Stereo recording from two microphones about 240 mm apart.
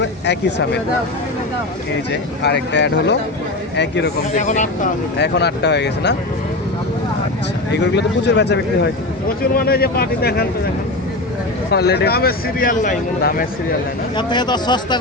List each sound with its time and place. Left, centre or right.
0.0 s speech: left
2.4 s speech: left
4.4 s speech: left
5.1 s speech: left
7.7 s speech: left
11.7 s speech: left
14.2 s speech: centre